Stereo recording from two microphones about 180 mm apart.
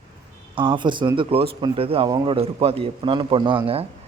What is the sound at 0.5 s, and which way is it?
Speech, 25° right (ahead or behind).